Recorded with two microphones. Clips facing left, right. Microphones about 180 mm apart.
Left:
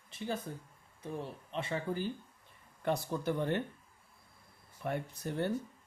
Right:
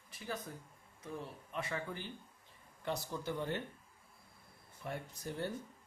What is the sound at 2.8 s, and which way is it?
Speech, 55° left (ahead or behind).